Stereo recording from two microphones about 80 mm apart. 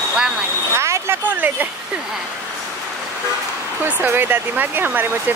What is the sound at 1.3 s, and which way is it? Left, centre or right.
Speech, right.